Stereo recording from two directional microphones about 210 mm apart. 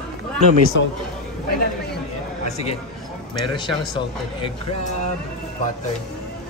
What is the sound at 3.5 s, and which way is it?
Speech, 20° left (ahead or behind).